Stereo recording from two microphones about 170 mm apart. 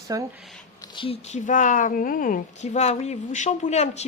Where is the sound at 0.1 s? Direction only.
20° right (ahead or behind).